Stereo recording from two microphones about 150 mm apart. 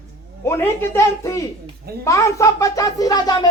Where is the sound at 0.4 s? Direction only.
15° left (ahead or behind).